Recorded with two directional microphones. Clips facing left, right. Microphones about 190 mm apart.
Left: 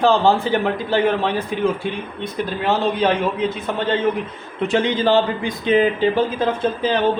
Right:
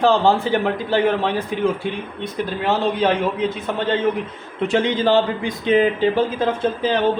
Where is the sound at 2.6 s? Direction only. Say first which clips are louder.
Even; 60° right (ahead or behind).